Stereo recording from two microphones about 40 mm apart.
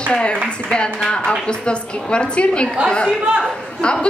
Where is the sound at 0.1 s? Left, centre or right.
Left.